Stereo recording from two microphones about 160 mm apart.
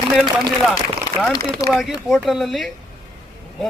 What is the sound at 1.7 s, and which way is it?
A man's voice, 5° right (ahead or behind).